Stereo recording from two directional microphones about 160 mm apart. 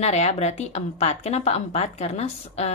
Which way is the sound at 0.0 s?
45° left (ahead or behind).